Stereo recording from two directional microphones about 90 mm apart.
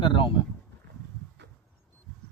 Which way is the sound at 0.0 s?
70° left (ahead or behind).